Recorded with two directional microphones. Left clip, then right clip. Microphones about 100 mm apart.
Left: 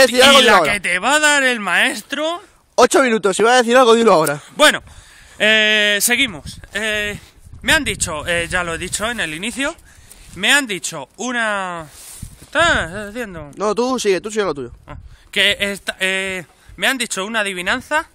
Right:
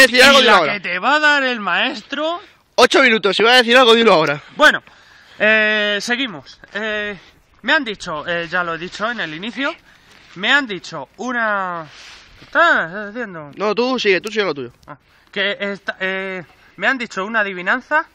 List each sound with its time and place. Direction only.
0.0 s speech: 25° left (ahead or behind)
5.4 s speech: 5° left (ahead or behind)
5.9 s speech: 25° left (ahead or behind)
10.8 s speech: 25° left (ahead or behind)